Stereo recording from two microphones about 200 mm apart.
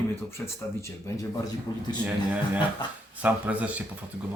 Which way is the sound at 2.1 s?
10° right (ahead or behind).